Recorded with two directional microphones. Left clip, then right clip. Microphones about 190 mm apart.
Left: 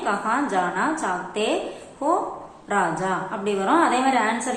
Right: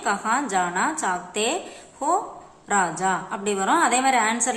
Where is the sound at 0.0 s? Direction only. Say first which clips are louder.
Even; 20° right (ahead or behind).